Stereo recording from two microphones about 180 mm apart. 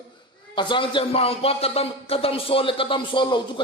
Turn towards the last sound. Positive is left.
turn(degrees=25)  # may be behind; listen again after turning